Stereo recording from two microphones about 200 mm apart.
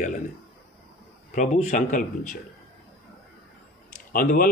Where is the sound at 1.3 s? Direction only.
40° left (ahead or behind).